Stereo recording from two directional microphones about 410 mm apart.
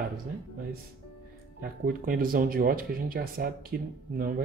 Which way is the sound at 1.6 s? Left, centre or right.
Right.